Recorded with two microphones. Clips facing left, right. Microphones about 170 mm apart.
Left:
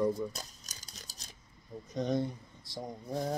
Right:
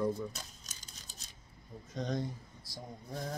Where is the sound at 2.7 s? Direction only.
30° left (ahead or behind).